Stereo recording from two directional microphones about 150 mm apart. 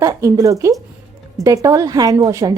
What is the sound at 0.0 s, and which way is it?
A woman's voice, 20° right (ahead or behind).